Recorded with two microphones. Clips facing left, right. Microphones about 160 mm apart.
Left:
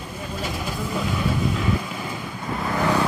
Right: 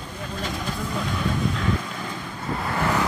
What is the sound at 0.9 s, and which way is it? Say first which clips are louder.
Vehicle: left 2 dB; 5° left (ahead or behind).